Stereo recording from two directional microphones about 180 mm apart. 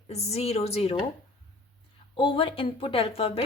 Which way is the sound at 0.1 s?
35° left (ahead or behind).